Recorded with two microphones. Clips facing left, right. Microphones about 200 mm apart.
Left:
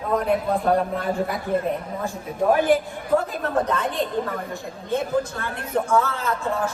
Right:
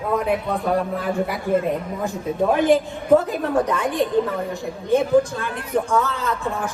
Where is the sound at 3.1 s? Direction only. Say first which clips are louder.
Right 5 dB; 15° right (ahead or behind).